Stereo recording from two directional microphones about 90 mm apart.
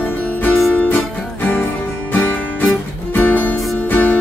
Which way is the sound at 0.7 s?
15° left (ahead or behind).